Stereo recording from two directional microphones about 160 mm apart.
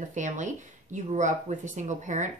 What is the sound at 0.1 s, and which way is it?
Speech, 50° right (ahead or behind).